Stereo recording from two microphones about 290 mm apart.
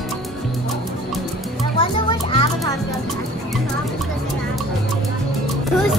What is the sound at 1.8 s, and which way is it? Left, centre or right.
Music, centre.